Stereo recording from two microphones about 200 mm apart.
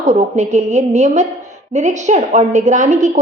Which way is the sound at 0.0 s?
35° right (ahead or behind).